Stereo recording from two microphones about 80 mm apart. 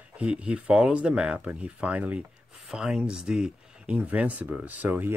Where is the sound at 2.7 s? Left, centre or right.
Centre.